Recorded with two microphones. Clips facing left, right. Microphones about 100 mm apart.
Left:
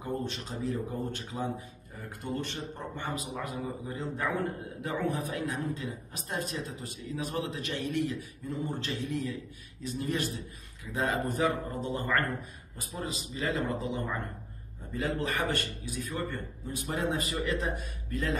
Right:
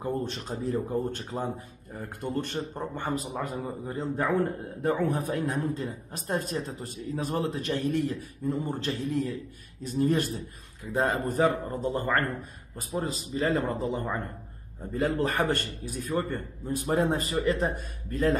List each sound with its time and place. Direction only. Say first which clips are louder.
0.0 s speech: right 4 dB; 40° right (ahead or behind)